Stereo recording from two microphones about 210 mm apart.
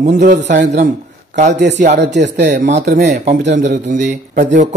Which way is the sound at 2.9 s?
35° right (ahead or behind).